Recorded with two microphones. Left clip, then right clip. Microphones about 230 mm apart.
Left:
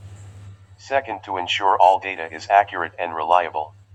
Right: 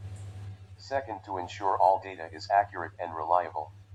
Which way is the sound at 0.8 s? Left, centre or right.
Left.